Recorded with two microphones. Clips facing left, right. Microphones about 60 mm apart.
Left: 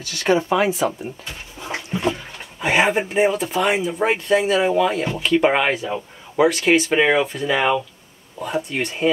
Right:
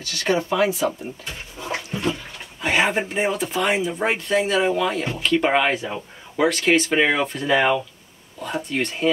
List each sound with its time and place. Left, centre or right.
0.0 s speech: left
1.6 s dog: left
2.6 s speech: centre
8.4 s speech: centre